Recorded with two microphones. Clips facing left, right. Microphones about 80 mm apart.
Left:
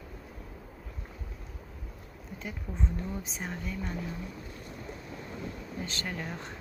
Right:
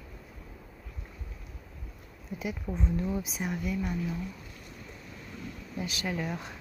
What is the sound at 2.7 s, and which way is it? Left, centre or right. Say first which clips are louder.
Speech: right 4 dB; centre.